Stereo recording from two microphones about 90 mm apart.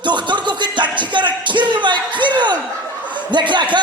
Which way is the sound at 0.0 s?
60° right (ahead or behind).